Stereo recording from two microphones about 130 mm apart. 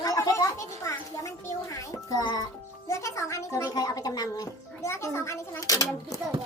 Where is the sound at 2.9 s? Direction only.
25° left (ahead or behind).